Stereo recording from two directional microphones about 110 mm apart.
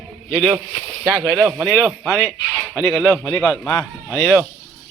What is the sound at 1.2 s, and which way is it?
A man's voice, 5° left (ahead or behind).